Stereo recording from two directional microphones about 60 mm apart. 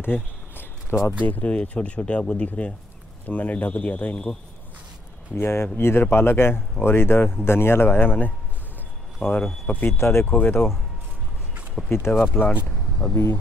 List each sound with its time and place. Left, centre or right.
0.0 s a sound: left
1.2 s speech: left
5.3 s speech: left
9.9 s speech: left
10.2 s speech: left
11.8 s a sound: centre
12.1 s speech: left